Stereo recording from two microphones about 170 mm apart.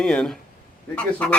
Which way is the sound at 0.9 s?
10° left (ahead or behind).